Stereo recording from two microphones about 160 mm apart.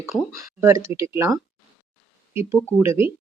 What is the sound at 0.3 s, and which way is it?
Speech, 20° right (ahead or behind).